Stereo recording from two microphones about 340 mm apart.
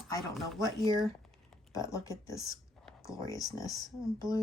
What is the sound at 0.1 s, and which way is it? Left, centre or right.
Speech, centre.